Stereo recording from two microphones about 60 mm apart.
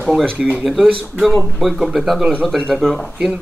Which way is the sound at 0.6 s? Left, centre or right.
Centre.